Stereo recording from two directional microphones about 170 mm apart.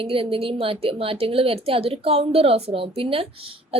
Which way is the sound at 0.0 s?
35° right (ahead or behind).